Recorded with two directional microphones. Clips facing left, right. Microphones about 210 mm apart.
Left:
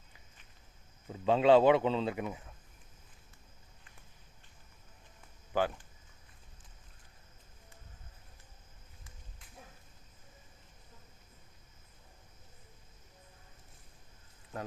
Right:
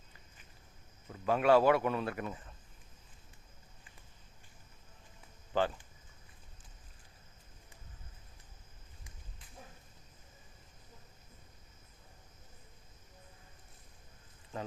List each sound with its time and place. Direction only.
1.1 s speech: 25° left (ahead or behind)
5.5 s speech: 10° left (ahead or behind)